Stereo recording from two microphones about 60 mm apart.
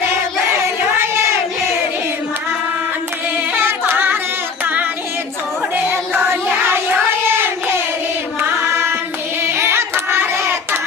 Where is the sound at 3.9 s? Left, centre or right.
Right.